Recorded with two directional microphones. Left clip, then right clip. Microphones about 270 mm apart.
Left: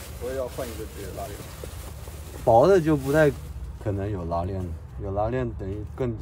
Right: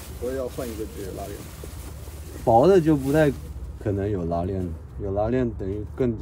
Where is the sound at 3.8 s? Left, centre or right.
Centre.